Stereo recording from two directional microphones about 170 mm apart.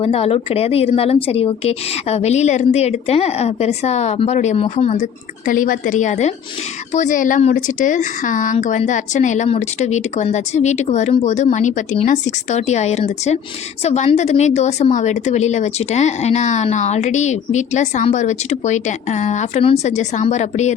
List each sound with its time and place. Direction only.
0.0 s speech: 35° left (ahead or behind)
5.5 s a woman's voice: 50° left (ahead or behind)